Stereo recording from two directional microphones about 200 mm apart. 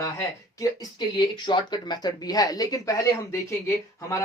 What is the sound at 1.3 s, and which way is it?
Speech, 20° left (ahead or behind).